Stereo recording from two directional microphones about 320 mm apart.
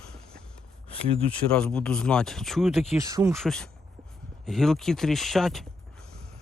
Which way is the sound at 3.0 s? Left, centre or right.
Centre.